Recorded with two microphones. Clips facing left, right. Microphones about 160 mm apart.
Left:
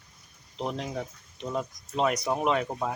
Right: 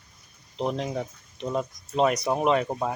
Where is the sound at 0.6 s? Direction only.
Centre (ahead or behind).